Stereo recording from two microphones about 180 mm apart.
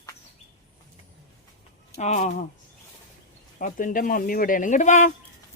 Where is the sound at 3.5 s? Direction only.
50° left (ahead or behind).